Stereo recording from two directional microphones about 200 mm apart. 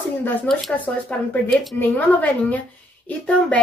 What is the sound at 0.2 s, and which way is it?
Speech, 5° left (ahead or behind).